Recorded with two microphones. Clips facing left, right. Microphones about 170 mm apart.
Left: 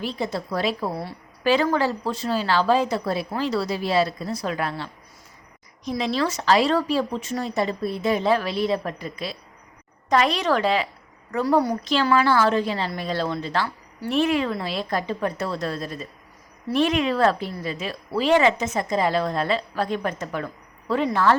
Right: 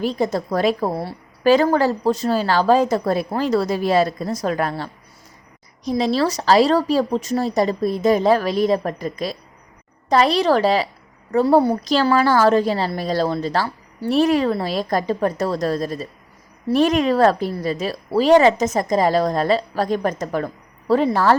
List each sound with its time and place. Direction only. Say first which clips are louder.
0.0 s a woman's voice: right 7 dB; 45° right (ahead or behind)